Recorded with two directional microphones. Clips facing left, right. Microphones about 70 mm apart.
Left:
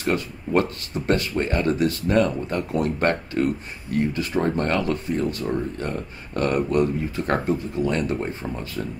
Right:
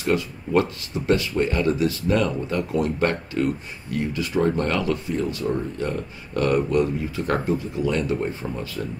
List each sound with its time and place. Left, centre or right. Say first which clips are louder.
0.1 s speech: right 1 dB; left